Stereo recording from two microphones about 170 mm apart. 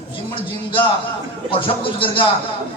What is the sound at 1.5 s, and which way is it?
Speech, 30° left (ahead or behind).